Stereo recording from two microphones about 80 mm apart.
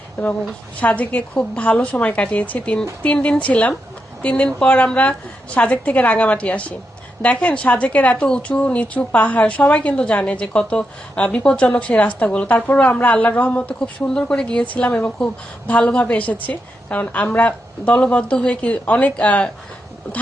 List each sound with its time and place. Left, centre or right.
0.8 s a woman's voice: centre